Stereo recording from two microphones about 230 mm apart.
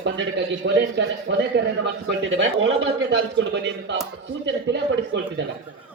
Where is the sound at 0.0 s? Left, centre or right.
Right.